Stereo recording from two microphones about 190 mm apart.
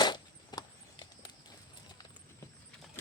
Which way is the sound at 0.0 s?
20° left (ahead or behind).